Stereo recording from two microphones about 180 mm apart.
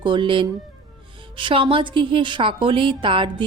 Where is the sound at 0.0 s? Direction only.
25° right (ahead or behind).